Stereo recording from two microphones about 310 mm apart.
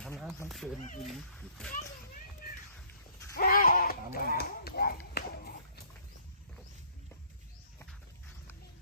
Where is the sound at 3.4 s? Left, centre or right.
Left.